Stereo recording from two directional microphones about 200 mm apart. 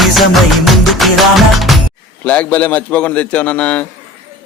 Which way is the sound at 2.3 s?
5° left (ahead or behind).